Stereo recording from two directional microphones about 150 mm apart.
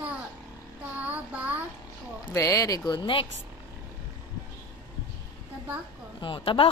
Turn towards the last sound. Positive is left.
turn(degrees=35)  # may be behind; listen again after turning